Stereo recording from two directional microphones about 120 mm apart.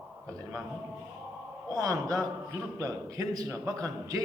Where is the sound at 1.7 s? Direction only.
30° right (ahead or behind).